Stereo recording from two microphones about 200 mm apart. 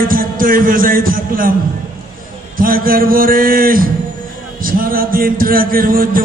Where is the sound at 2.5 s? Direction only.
45° right (ahead or behind).